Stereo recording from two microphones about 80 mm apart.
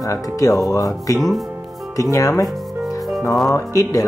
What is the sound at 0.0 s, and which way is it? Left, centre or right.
Speech, left.